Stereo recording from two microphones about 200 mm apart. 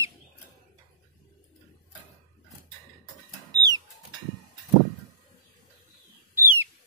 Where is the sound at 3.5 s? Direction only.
20° right (ahead or behind).